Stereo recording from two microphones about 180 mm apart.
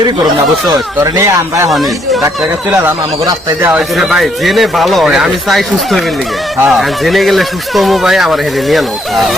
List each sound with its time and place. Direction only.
1.0 s speech: 15° right (ahead or behind)
3.8 s speech: 5° right (ahead or behind)